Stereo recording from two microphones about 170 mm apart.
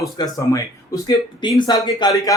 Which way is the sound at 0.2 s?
20° left (ahead or behind).